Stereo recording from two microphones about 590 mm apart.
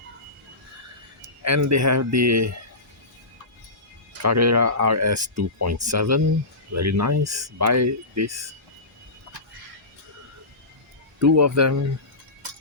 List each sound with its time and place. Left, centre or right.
1.4 s speech: right
4.2 s speech: right
11.2 s speech: right